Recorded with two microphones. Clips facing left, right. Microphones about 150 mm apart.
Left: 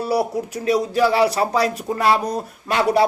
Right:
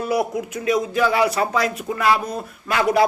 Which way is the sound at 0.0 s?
35° left (ahead or behind).